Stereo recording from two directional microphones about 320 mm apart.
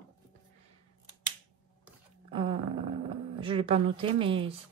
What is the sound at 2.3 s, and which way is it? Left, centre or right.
A woman's voice, centre.